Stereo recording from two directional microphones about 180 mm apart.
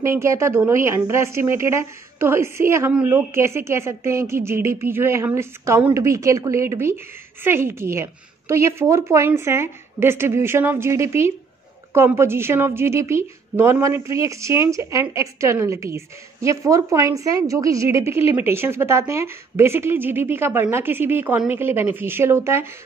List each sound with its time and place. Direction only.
0.0 s speech: 15° right (ahead or behind)